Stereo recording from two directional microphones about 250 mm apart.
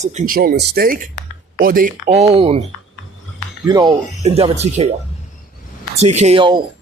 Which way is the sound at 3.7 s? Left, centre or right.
Centre.